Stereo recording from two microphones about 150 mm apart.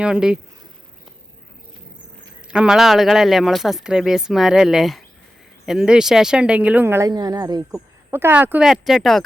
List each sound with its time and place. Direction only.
0.0 s speech: 5° right (ahead or behind)
2.5 s speech: 5° right (ahead or behind)
7.1 s speech: 30° right (ahead or behind)
8.1 s speech: 15° right (ahead or behind)